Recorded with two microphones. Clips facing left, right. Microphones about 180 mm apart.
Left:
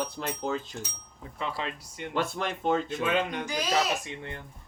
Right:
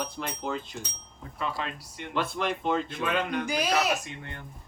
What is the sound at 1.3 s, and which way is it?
Speech, 25° left (ahead or behind).